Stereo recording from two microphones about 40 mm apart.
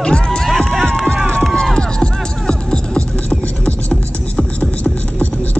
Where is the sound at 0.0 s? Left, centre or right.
Left.